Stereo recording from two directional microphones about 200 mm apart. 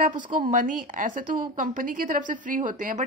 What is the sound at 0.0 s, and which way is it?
A woman's voice, 40° right (ahead or behind).